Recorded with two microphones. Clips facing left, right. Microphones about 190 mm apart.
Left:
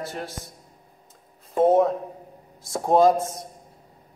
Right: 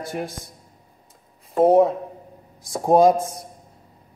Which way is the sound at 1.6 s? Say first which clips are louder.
Right 3 dB; centre (ahead or behind).